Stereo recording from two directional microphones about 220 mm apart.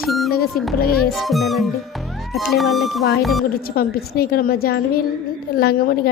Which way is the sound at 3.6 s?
45° left (ahead or behind).